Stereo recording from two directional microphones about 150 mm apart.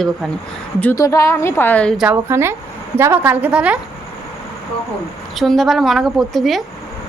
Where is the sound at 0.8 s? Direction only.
15° left (ahead or behind).